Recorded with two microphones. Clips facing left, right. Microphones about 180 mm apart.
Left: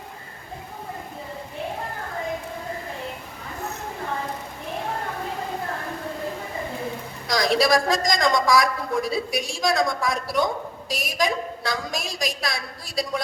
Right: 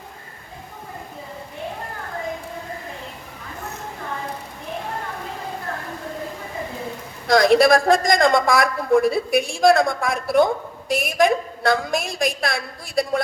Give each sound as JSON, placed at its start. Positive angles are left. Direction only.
{"t": 7.3, "sound": "a woman's voice", "side_deg": -55}